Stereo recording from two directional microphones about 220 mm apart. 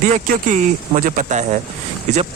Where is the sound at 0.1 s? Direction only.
35° right (ahead or behind).